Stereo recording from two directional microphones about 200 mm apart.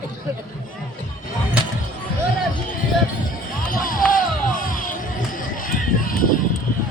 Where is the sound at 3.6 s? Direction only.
45° left (ahead or behind).